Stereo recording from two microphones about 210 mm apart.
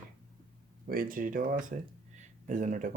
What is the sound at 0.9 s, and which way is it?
Speech, 45° right (ahead or behind).